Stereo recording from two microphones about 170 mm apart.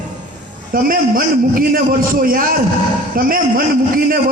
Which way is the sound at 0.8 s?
55° right (ahead or behind).